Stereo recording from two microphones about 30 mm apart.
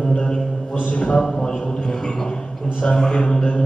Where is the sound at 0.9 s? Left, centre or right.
Left.